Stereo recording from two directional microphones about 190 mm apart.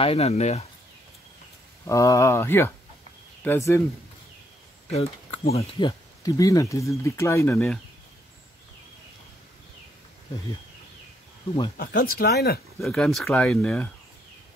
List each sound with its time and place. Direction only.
0.0 s speech: 30° left (ahead or behind)
1.9 s speech: 15° left (ahead or behind)
5.5 s speech: 30° left (ahead or behind); by 7.8 s 10° left (ahead or behind)
11.7 s speech: 55° left (ahead or behind)
12.8 s speech: centre (ahead or behind)